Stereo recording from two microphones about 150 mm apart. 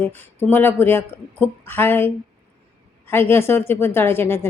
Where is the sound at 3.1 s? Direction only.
15° left (ahead or behind).